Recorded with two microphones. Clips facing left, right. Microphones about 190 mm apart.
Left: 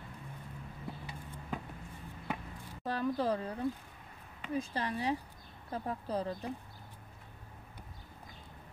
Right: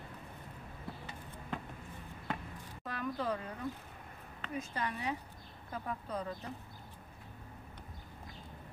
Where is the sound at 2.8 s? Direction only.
35° left (ahead or behind).